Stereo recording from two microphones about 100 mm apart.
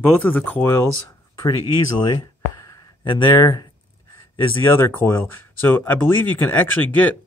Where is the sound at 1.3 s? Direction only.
40° left (ahead or behind).